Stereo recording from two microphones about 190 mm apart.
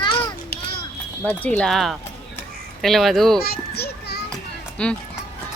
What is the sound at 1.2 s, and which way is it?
Speech, 10° left (ahead or behind).